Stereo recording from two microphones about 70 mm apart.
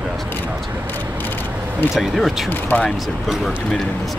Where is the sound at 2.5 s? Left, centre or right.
Left.